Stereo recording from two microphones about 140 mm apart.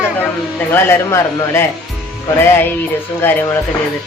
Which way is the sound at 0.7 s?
20° left (ahead or behind).